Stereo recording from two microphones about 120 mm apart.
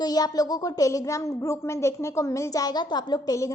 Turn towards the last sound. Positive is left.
turn(degrees=30)  # may be behind; listen again after turning